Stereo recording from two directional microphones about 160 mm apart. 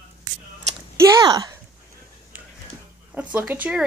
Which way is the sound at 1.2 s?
25° right (ahead or behind).